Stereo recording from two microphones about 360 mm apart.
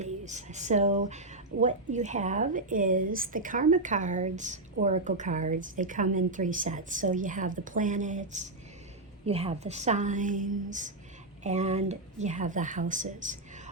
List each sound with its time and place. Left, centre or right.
0.0 s a woman's voice: centre